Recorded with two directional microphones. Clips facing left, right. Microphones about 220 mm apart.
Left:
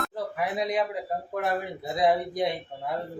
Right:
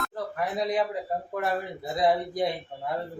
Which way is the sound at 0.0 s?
5° left (ahead or behind).